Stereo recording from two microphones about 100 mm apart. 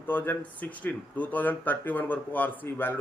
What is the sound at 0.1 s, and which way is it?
A man's voice, 20° left (ahead or behind).